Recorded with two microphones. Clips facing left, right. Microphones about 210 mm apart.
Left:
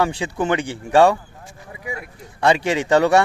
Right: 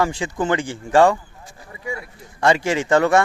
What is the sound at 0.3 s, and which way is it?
Speech, 15° left (ahead or behind).